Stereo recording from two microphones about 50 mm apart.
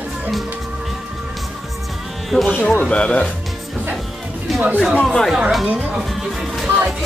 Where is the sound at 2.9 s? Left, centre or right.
Left.